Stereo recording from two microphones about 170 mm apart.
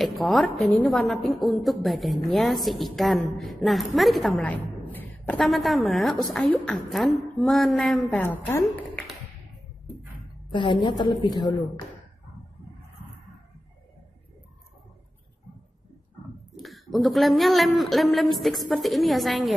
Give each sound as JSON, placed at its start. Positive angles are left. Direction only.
{"t": 0.0, "sound": "a woman's voice", "side_deg": 0}
{"t": 8.6, "sound": "tap", "side_deg": 5}
{"t": 10.5, "sound": "a woman's voice", "side_deg": 30}
{"t": 16.5, "sound": "a woman's voice", "side_deg": 0}